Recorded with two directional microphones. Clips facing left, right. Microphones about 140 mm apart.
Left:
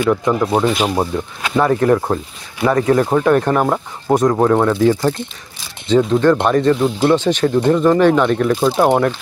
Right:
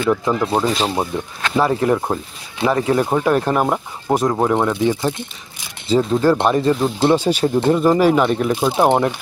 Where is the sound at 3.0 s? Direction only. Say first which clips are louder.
Left 3 dB; 10° right (ahead or behind).